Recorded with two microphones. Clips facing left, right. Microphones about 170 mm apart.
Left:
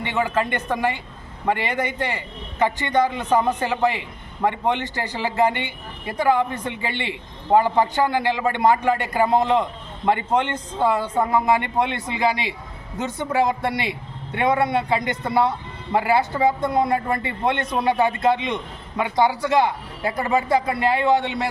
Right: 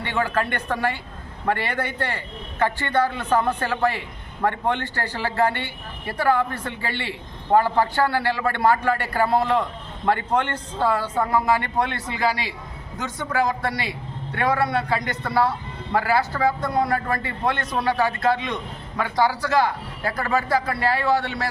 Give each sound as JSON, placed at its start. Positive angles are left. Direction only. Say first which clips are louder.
{"t": 0.0, "sound": "a man's voice", "louder": "left 1 dB", "side_deg": 15}